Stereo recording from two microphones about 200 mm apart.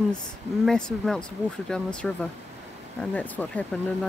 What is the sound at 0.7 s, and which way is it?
Speech, 5° left (ahead or behind).